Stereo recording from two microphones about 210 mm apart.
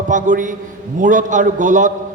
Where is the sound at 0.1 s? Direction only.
35° right (ahead or behind).